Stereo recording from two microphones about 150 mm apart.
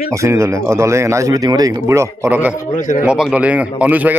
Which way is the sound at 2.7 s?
60° left (ahead or behind).